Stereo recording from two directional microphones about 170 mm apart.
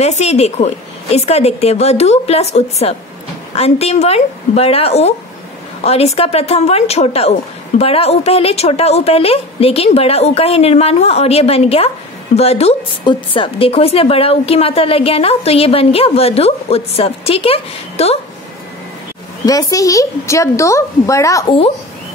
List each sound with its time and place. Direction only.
0.0 s speech: 40° left (ahead or behind)
19.4 s a woman's voice: 20° left (ahead or behind)